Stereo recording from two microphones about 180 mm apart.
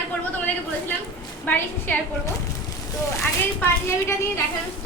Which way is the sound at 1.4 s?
10° left (ahead or behind).